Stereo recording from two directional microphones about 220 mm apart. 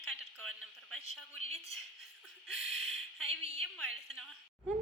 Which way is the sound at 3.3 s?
25° right (ahead or behind).